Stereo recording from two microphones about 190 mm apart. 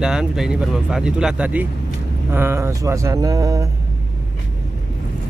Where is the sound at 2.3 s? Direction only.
10° right (ahead or behind).